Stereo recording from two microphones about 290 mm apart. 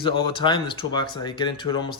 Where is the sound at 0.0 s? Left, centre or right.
Centre.